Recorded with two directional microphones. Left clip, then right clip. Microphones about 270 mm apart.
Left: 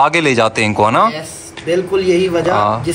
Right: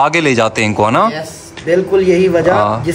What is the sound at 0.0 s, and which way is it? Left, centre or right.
Speech, centre.